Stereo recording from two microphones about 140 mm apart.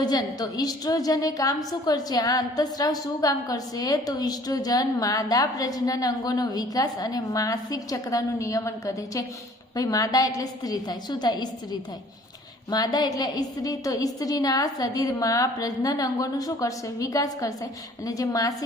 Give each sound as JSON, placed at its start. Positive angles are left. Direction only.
{"t": 0.0, "sound": "a woman's voice", "side_deg": 30}